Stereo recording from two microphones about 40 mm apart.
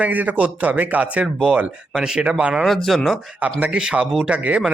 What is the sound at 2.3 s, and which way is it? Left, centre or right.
Speech, right.